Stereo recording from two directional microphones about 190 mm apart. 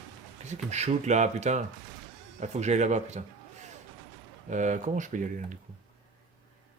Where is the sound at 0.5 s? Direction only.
35° right (ahead or behind).